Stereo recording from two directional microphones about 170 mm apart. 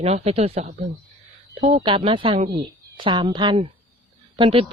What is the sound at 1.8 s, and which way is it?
Speech, 30° right (ahead or behind).